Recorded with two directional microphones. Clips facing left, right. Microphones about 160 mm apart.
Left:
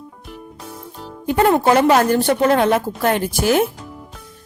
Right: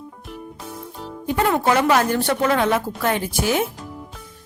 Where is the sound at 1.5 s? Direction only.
35° left (ahead or behind).